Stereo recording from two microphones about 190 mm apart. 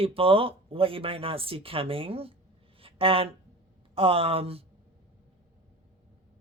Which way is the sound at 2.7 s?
30° right (ahead or behind).